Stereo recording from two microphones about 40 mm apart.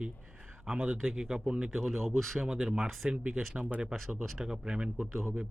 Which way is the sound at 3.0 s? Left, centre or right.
Right.